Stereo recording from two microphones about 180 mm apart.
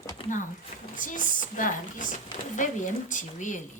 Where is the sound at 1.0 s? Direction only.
45° left (ahead or behind).